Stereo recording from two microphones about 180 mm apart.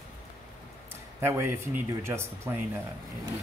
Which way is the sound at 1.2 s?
15° right (ahead or behind).